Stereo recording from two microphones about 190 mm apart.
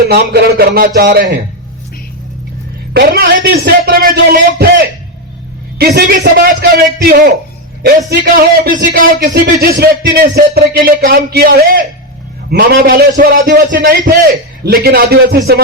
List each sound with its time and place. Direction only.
0.1 s a man's voice: 55° right (ahead or behind)
2.9 s speech: 55° right (ahead or behind)
5.8 s speech: 55° right (ahead or behind)
13.5 s a man's voice: 70° right (ahead or behind)
13.7 s speech: 45° right (ahead or behind)